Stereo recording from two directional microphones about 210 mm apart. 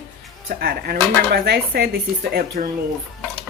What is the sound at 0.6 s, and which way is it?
Speech, 45° right (ahead or behind).